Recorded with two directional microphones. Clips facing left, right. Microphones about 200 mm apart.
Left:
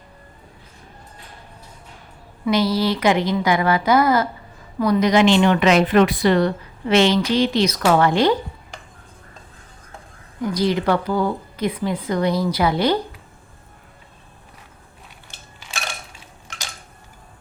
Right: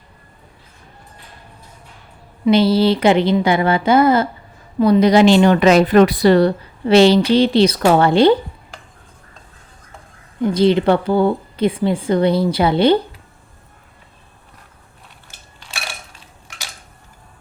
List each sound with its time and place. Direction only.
2.4 s a woman's voice: 30° right (ahead or behind)
10.4 s speech: 25° right (ahead or behind)
15.6 s dishes: 5° left (ahead or behind)